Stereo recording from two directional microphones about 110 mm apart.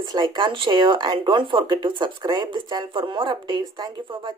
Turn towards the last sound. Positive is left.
turn(degrees=-40)  # may be behind; listen again after turning